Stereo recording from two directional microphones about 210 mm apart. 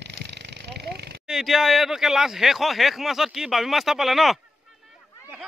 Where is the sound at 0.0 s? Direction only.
55° right (ahead or behind).